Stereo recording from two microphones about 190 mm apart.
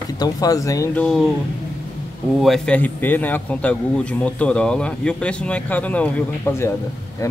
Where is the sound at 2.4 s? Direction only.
5° left (ahead or behind).